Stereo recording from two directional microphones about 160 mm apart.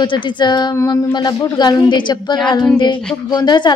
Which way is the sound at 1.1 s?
25° left (ahead or behind).